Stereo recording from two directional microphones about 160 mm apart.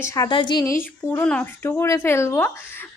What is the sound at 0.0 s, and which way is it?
Speech, 20° left (ahead or behind).